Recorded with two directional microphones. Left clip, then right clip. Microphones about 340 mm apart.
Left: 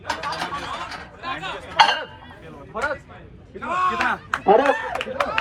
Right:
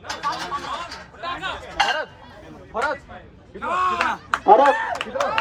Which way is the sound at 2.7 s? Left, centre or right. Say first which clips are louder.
Right 2 dB; right.